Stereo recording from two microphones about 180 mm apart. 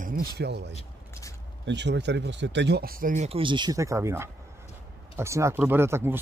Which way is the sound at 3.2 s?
30° right (ahead or behind).